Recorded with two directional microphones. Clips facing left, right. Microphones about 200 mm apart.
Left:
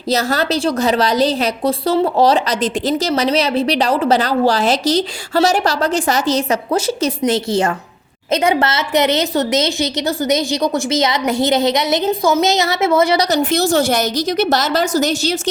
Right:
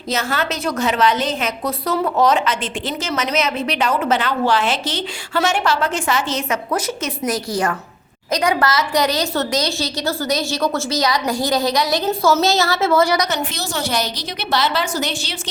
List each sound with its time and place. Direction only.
0.1 s a woman's voice: 35° left (ahead or behind); by 13.1 s 20° left (ahead or behind)
13.1 s a woman's voice: 40° left (ahead or behind)